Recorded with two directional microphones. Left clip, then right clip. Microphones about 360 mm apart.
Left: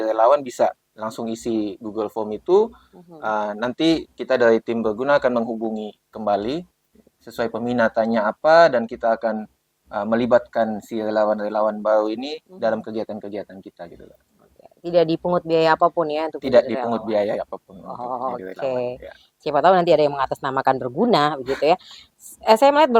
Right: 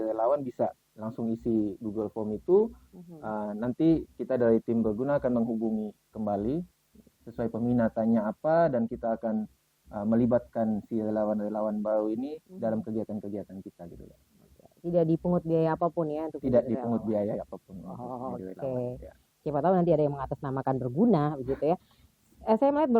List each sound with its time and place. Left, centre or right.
0.0 s speech: centre
5.5 s speech: centre
6.2 s speech: centre
15.2 s speech: centre
15.4 s speech: centre